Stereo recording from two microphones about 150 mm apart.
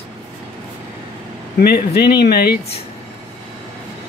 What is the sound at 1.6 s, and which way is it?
Speech, 90° left.